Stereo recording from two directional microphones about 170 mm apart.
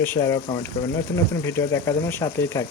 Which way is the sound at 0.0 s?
15° left (ahead or behind).